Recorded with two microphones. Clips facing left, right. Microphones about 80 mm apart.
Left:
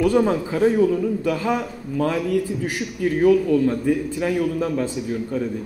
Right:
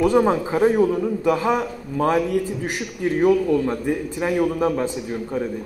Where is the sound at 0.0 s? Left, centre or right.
Right.